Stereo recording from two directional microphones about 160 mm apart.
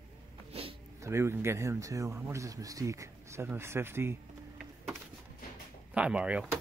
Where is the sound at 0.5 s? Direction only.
35° right (ahead or behind).